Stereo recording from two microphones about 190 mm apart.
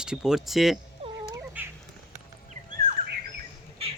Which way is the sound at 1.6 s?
10° right (ahead or behind).